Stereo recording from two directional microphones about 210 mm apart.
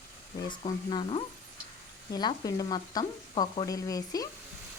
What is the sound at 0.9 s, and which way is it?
Speech, 25° left (ahead or behind).